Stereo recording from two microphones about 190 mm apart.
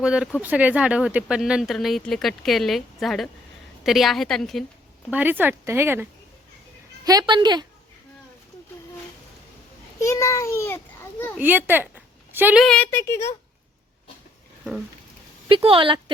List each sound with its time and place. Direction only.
0.0 s speech: 5° right (ahead or behind)
5.1 s a woman's voice: 10° right (ahead or behind)
10.0 s a child's voice: 15° left (ahead or behind)
11.3 s speech: 10° right (ahead or behind)
12.6 s a child's voice: 5° left (ahead or behind)
15.4 s a woman's voice: 30° right (ahead or behind)